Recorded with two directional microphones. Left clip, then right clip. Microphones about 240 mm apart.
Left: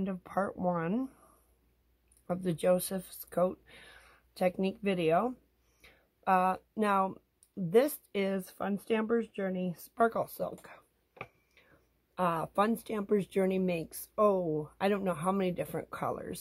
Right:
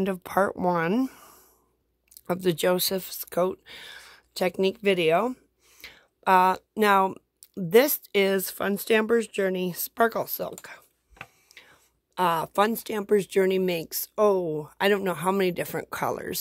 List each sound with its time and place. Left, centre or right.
0.0 s speech: right
11.5 s whispering: right
12.2 s speech: right